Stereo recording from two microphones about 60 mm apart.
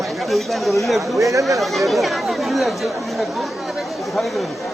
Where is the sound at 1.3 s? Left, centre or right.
Right.